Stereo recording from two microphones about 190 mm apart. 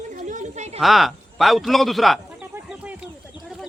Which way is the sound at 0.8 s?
Centre (ahead or behind).